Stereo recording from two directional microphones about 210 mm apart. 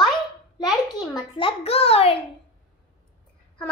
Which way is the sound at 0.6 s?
20° left (ahead or behind).